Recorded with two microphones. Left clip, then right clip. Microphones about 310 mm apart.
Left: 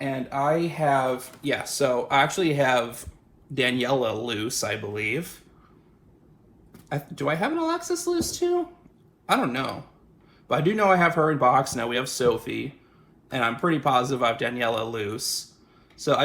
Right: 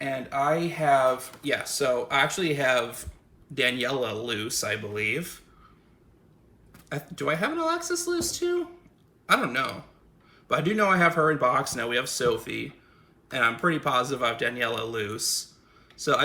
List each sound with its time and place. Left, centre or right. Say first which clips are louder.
0.0 s speech: left 1 dB; centre
6.8 s speech: left 2 dB; centre